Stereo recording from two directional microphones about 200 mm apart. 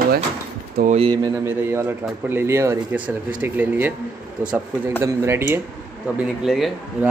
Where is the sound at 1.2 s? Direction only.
10° right (ahead or behind).